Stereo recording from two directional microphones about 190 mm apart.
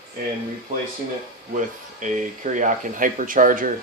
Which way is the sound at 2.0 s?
40° right (ahead or behind).